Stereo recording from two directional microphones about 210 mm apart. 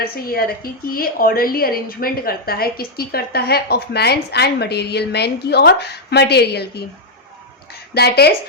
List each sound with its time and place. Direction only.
0.0 s a woman's voice: 45° left (ahead or behind)
7.9 s a woman's voice: 50° left (ahead or behind)